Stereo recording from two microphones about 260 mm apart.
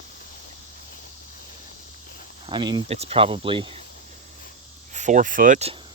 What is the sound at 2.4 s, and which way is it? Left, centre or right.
Speech, centre.